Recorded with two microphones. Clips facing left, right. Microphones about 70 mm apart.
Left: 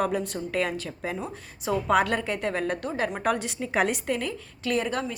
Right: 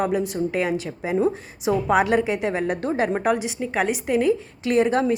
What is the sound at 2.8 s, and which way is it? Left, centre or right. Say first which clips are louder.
Speech: right 6 dB; right.